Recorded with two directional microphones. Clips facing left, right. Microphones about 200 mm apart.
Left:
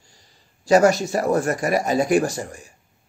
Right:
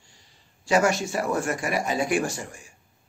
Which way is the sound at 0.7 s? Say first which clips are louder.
Left 6 dB; 40° left (ahead or behind).